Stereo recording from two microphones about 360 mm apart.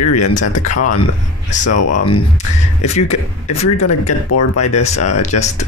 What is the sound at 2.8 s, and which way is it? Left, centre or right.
Speech, centre.